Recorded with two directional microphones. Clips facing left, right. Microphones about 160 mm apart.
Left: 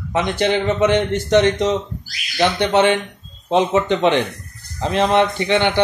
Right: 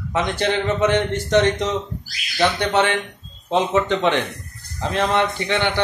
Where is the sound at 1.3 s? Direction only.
20° left (ahead or behind).